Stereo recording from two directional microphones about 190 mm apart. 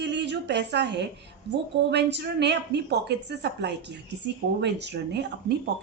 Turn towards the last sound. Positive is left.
turn(degrees=-65)  # may be behind; listen again after turning